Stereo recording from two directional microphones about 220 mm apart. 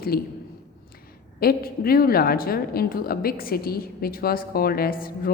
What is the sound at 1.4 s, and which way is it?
A woman's voice, 45° left (ahead or behind).